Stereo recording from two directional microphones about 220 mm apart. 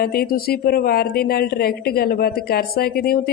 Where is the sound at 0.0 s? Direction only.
40° left (ahead or behind).